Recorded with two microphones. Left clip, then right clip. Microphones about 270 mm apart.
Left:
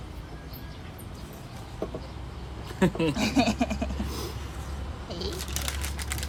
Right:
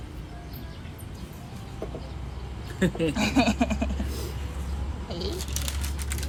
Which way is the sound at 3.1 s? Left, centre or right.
Centre.